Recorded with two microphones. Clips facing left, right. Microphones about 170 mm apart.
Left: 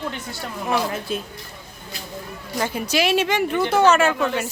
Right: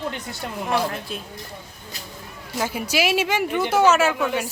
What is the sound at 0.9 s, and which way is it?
Speech, centre (ahead or behind).